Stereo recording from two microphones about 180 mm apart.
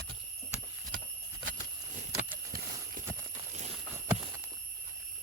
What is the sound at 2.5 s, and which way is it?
Clip-clop, 55° right (ahead or behind).